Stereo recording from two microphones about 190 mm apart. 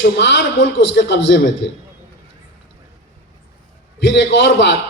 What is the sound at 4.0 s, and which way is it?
Speech, 70° left (ahead or behind).